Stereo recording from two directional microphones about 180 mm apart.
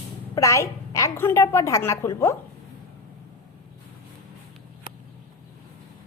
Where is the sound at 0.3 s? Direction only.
15° left (ahead or behind).